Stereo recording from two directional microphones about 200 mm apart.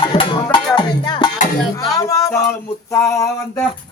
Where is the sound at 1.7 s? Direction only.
15° left (ahead or behind).